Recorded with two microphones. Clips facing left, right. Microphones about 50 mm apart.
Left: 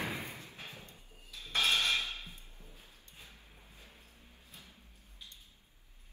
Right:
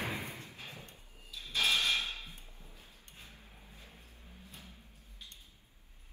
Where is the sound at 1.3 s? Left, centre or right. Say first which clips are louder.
Left 1 dB; left.